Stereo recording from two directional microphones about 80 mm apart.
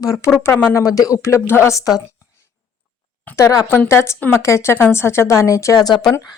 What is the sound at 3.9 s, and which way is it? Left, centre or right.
Speech, left.